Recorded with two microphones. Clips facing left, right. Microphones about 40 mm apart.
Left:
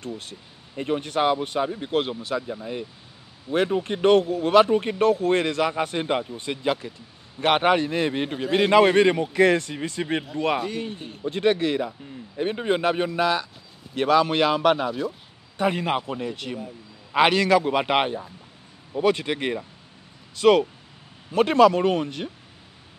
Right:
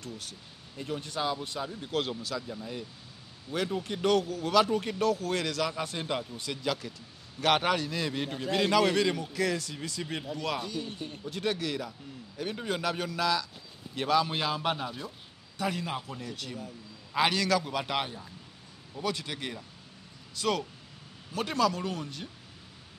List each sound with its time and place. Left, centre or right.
0.0 s speech: left
13.9 s a man's voice: left